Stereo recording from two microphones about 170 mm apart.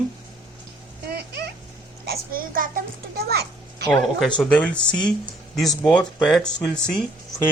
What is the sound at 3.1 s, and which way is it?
Speech, 70° right (ahead or behind).